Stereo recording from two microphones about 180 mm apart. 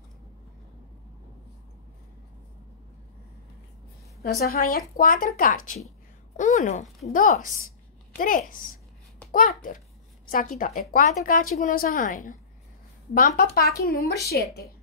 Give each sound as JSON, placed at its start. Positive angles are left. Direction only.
{"t": 4.2, "sound": "speech", "side_deg": 55}
{"t": 13.4, "sound": "a child's voice", "side_deg": 60}
{"t": 13.9, "sound": "a woman's voice", "side_deg": 20}